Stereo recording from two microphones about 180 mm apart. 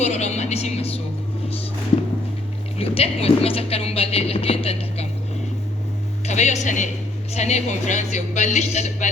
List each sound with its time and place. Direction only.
0.0 s a sound: 40° left (ahead or behind)
2.7 s speech: 35° left (ahead or behind)
6.2 s speech: 40° left (ahead or behind)